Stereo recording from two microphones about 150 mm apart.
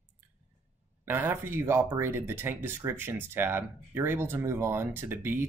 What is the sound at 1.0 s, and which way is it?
Speech, 15° right (ahead or behind).